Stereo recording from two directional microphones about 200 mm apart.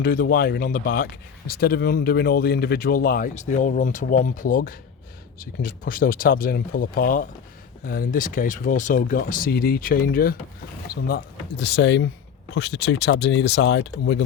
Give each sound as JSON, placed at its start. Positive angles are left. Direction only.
{"t": 0.0, "sound": "speech", "side_deg": 45}